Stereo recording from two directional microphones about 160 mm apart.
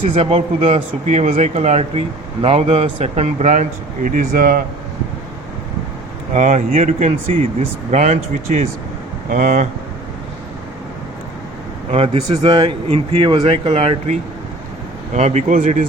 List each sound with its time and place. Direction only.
0.0 s speech: 40° right (ahead or behind); by 4.6 s 60° right (ahead or behind)
6.3 s speech: 50° right (ahead or behind)
11.9 s speech: 40° right (ahead or behind)
12.3 s speech: 25° right (ahead or behind); by 15.9 s 55° right (ahead or behind)